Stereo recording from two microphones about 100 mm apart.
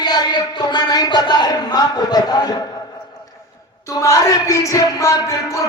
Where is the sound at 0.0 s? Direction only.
45° left (ahead or behind).